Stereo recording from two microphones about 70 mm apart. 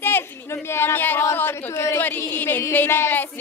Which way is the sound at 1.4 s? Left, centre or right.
Left.